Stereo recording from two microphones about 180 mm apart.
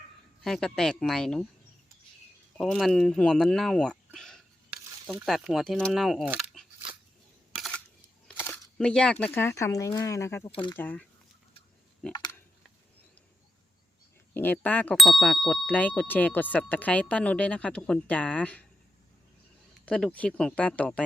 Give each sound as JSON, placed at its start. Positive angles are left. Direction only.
{"t": 0.4, "sound": "speech", "side_deg": 5}
{"t": 2.6, "sound": "speech", "side_deg": 0}
{"t": 7.5, "sound": "camera", "side_deg": 0}
{"t": 8.3, "sound": "speech", "side_deg": 10}
{"t": 10.5, "sound": "speech", "side_deg": 25}
{"t": 10.8, "sound": "speech", "side_deg": 10}
{"t": 12.1, "sound": "a sound", "side_deg": 25}
{"t": 14.3, "sound": "speech", "side_deg": 10}
{"t": 19.8, "sound": "speech", "side_deg": 5}